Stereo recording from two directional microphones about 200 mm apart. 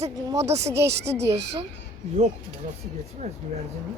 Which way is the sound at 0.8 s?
55° right (ahead or behind).